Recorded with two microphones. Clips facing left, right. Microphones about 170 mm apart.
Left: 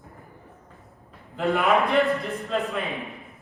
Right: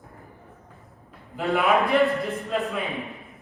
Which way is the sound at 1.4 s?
Centre (ahead or behind).